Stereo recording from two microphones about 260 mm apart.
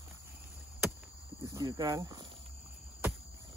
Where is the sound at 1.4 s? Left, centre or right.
Centre.